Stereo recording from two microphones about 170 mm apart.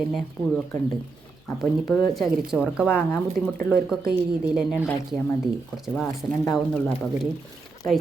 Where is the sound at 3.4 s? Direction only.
60° right (ahead or behind).